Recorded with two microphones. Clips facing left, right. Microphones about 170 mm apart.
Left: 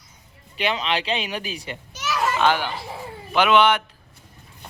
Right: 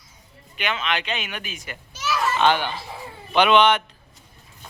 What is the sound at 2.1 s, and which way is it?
Children playing, 10° left (ahead or behind).